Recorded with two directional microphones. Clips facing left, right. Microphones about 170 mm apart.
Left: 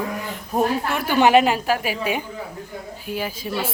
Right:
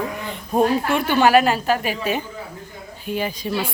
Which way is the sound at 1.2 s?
20° left (ahead or behind).